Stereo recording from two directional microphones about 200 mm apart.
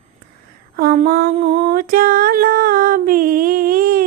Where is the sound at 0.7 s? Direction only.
50° right (ahead or behind).